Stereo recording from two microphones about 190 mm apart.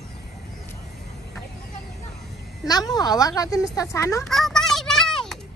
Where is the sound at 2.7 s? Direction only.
20° left (ahead or behind).